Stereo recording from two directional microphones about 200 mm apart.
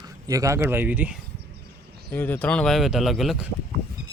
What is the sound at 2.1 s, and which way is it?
A man's voice, 10° left (ahead or behind).